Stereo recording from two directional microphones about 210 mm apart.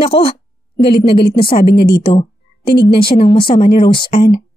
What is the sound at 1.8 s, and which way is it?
A woman's voice, 50° left (ahead or behind).